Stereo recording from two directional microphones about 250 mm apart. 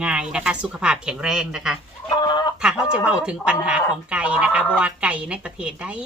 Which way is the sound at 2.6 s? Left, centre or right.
Centre.